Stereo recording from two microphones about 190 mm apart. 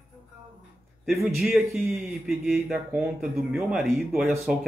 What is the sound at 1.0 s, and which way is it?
Speech, centre (ahead or behind).